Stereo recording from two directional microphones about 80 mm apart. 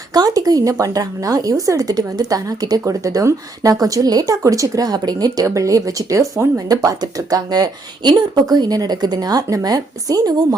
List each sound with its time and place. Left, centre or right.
0.1 s speech: right